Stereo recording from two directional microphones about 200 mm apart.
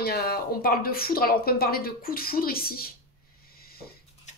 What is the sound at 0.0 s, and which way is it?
A woman's voice, 50° left (ahead or behind).